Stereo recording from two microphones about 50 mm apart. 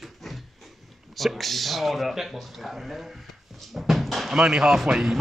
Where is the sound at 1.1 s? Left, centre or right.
Centre.